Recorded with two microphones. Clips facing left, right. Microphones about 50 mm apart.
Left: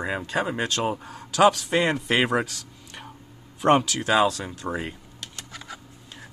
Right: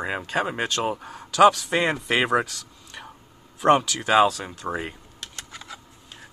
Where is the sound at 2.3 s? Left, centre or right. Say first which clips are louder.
Right 2 dB; centre.